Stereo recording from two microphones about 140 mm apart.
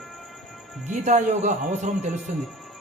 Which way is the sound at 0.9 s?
60° right (ahead or behind).